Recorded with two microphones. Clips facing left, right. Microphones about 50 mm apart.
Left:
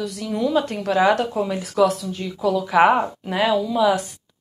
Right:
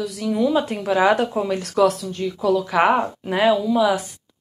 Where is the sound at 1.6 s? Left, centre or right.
Centre.